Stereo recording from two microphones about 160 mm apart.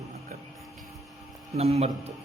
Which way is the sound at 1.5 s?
40° right (ahead or behind).